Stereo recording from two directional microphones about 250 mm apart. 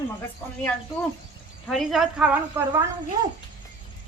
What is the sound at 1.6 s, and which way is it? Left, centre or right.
A woman's voice, centre.